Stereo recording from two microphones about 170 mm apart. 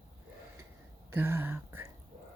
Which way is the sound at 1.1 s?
15° right (ahead or behind).